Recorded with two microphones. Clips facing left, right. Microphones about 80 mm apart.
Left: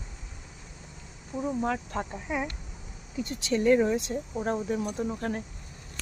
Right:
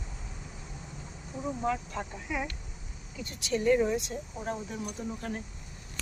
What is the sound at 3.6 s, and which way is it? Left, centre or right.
Speech, left.